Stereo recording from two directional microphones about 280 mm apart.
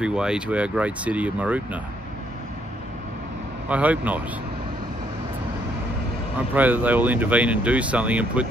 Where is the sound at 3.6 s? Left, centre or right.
Centre.